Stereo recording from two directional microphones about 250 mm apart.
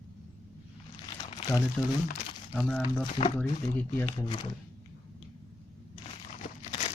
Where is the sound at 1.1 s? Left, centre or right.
Left.